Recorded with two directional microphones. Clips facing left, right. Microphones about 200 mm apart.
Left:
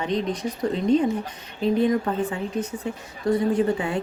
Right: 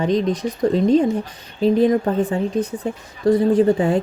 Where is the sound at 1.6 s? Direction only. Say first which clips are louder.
Right 5 dB; 35° right (ahead or behind).